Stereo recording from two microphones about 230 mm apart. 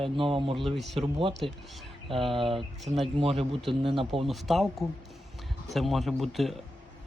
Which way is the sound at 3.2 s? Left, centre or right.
Right.